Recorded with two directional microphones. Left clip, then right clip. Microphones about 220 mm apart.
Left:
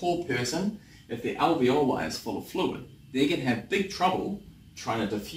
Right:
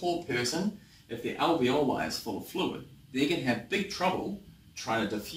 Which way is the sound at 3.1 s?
Centre (ahead or behind).